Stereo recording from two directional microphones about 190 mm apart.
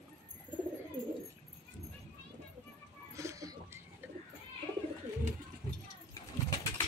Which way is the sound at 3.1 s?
15° right (ahead or behind).